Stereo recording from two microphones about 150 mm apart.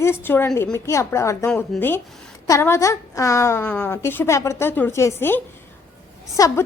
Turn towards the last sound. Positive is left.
turn(degrees=20)  # may be behind; listen again after turning